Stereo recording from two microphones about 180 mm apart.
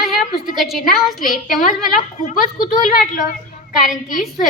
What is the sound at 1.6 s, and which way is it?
Speech, 45° left (ahead or behind).